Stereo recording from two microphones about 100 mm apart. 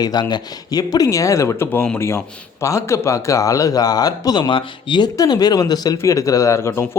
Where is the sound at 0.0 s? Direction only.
45° left (ahead or behind).